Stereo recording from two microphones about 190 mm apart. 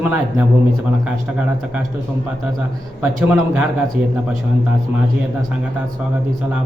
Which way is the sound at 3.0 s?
5° right (ahead or behind).